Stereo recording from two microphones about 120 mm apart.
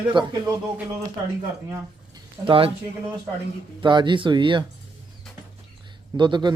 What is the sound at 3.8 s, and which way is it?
Speech, 40° right (ahead or behind).